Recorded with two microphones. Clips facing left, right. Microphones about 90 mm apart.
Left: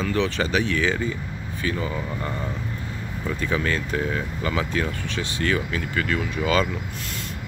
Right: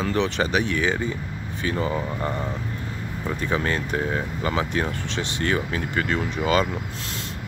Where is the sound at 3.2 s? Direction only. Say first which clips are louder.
Even; 20° right (ahead or behind).